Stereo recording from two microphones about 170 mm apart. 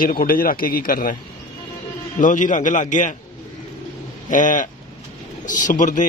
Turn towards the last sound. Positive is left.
turn(degrees=50)  # may be behind; listen again after turning